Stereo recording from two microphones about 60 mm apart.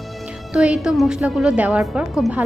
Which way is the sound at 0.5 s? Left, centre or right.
Centre.